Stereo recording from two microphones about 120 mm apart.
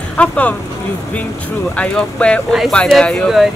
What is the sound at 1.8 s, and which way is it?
Speech, 10° left (ahead or behind).